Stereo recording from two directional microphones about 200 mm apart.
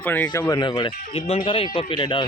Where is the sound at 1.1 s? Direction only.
30° left (ahead or behind).